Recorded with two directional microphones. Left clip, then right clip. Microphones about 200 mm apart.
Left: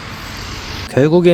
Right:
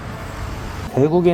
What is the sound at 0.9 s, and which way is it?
Speech, 65° left (ahead or behind).